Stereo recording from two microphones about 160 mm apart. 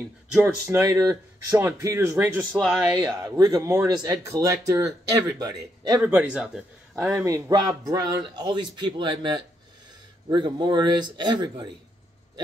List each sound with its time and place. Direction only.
0.3 s speech: 10° right (ahead or behind)
3.2 s speech: 25° right (ahead or behind)
5.9 s speech: 10° right (ahead or behind)
7.2 s speech: 20° right (ahead or behind)
10.3 s speech: 30° right (ahead or behind)